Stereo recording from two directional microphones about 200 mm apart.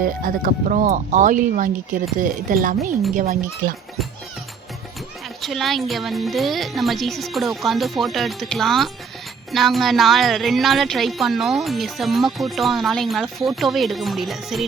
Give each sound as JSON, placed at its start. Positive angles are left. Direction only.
{"t": 0.0, "sound": "speech", "side_deg": -45}
{"t": 5.4, "sound": "a woman's voice", "side_deg": 0}